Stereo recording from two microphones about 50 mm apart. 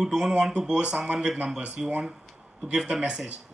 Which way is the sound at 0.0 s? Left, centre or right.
Centre.